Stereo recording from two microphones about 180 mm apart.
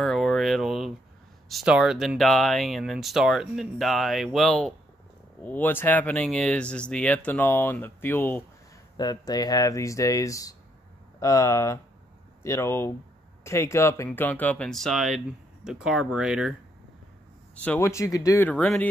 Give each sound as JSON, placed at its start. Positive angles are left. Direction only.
{"t": 0.0, "sound": "a sound", "side_deg": 0}
{"t": 1.5, "sound": "speech", "side_deg": -5}
{"t": 8.9, "sound": "speech", "side_deg": 20}
{"t": 17.6, "sound": "speech", "side_deg": 15}